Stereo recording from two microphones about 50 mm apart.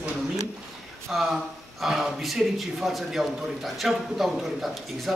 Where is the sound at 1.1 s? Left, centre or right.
Centre.